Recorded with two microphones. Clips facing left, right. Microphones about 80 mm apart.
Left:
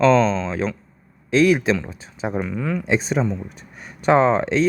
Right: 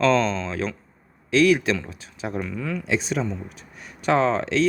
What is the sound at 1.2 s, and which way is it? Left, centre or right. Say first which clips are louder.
Speech: left 2 dB; left.